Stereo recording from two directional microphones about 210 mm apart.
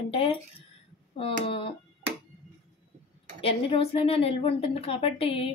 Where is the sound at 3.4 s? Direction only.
25° left (ahead or behind).